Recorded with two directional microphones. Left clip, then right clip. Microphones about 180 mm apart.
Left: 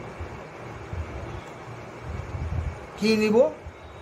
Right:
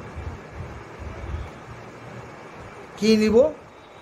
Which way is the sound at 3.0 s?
35° right (ahead or behind).